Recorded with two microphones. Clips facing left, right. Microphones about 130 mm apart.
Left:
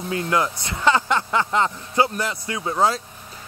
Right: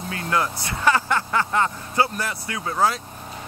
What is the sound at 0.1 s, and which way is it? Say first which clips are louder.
Speech: left 2 dB; 20° left (ahead or behind).